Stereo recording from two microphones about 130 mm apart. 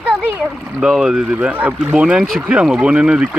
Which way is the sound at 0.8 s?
5° right (ahead or behind).